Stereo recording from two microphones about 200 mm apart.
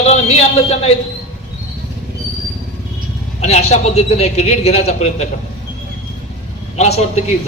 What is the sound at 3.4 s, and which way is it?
A man's voice, 35° left (ahead or behind).